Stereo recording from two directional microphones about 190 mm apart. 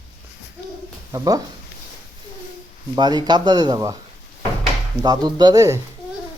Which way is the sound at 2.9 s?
25° right (ahead or behind).